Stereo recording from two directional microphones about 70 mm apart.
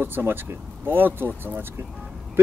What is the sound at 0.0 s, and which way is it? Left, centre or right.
Speech, right.